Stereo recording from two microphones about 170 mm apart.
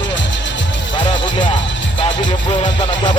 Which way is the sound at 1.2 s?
90° left.